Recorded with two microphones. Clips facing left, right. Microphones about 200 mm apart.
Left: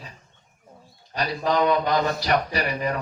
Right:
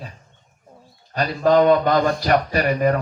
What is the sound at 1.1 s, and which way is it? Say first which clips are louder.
Speech: right 7 dB; 50° right (ahead or behind).